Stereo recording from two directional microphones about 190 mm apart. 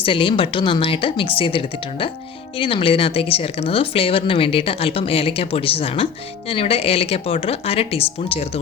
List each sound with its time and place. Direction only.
0.0 s a woman's voice: 25° left (ahead or behind)